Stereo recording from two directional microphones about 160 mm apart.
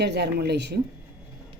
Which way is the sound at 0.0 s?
90° right.